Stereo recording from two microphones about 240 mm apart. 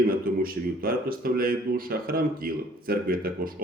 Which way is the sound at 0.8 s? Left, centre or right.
Right.